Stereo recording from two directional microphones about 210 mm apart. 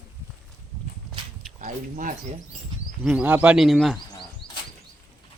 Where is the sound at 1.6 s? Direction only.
35° right (ahead or behind).